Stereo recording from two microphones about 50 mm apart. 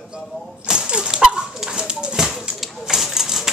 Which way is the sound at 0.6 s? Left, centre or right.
Centre.